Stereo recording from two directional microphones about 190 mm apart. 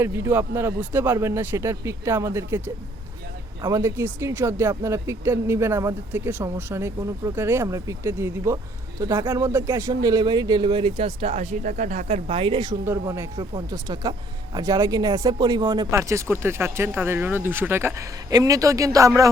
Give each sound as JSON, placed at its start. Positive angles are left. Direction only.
{"t": 0.0, "sound": "speech", "side_deg": -10}
{"t": 12.8, "sound": "speech", "side_deg": -15}